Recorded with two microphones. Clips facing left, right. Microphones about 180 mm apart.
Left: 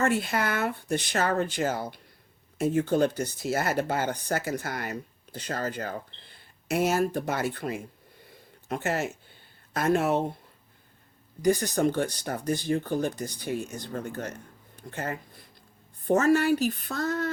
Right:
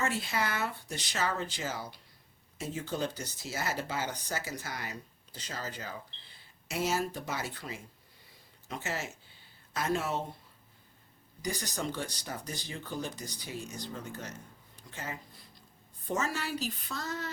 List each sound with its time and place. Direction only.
0.0 s speech: 55° left (ahead or behind)
8.3 s a sound: 55° left (ahead or behind)
9.7 s speech: 55° left (ahead or behind)
11.4 s speech: 55° left (ahead or behind)